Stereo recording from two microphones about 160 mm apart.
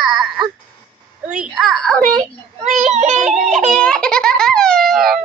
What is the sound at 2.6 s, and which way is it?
Child singing, 50° right (ahead or behind).